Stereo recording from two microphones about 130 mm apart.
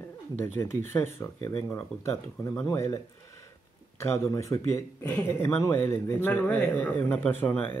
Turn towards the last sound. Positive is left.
turn(degrees=15)  # may be behind; listen again after turning